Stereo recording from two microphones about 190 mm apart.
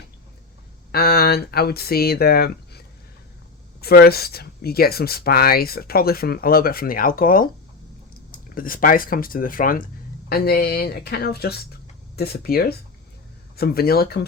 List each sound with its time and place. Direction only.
0.9 s speech: 55° left (ahead or behind)